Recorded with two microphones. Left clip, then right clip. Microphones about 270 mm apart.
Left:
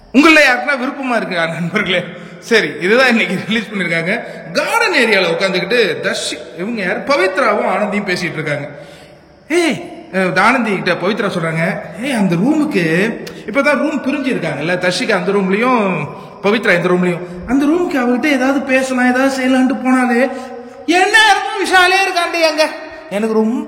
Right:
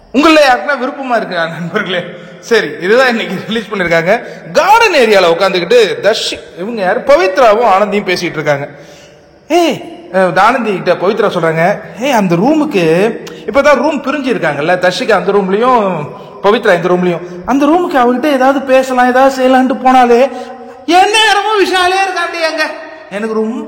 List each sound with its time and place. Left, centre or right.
0.1 s a man's voice: centre
3.7 s a man's voice: centre